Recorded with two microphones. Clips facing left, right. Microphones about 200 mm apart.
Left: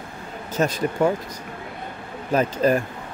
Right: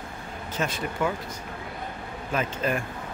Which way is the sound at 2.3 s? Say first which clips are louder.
Left 8 dB; 40° left (ahead or behind).